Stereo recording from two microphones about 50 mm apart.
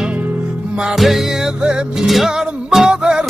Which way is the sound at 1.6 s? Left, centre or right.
Centre.